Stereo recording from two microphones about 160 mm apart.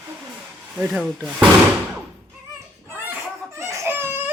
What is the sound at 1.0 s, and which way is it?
Speech, centre (ahead or behind).